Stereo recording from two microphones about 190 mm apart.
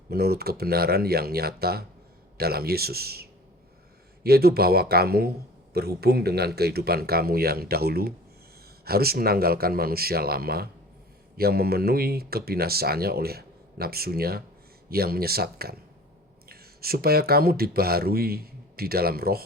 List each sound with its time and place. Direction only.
0.1 s speech: 55° right (ahead or behind)